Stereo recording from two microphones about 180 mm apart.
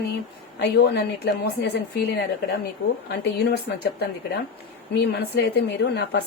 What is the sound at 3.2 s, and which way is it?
A woman's voice, 70° left (ahead or behind).